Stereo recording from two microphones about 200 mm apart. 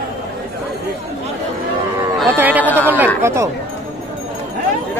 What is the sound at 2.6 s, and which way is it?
Speech, 10° left (ahead or behind).